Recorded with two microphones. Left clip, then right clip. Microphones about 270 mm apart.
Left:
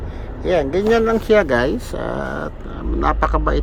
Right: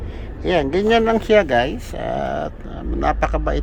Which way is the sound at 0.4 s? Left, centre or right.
Right.